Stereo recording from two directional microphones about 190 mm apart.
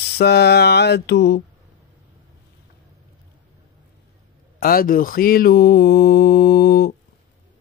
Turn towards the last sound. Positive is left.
turn(degrees=50)  # may be behind; listen again after turning